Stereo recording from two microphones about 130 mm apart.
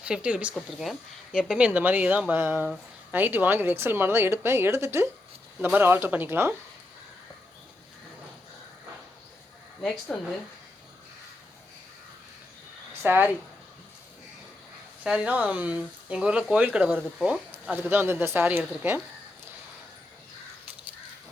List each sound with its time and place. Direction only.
0.0 s speech: 10° right (ahead or behind)
9.8 s speech: 5° left (ahead or behind)
13.0 s speech: 15° right (ahead or behind)
15.0 s speech: 10° right (ahead or behind)
17.7 s speech: 15° right (ahead or behind)